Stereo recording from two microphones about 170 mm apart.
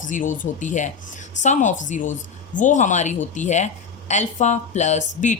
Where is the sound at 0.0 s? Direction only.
50° left (ahead or behind).